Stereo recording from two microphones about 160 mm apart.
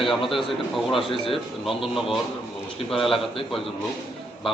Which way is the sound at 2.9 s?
35° left (ahead or behind).